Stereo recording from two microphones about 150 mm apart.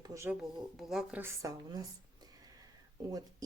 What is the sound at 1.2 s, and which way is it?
Speech, 25° right (ahead or behind).